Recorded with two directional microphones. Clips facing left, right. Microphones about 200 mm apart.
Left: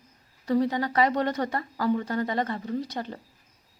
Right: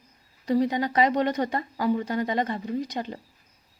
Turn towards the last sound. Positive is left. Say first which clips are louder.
# right 1 dB
turn(degrees=-15)  # may be behind; listen again after turning